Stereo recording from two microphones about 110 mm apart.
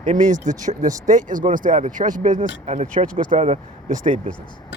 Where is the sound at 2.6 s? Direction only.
90° right.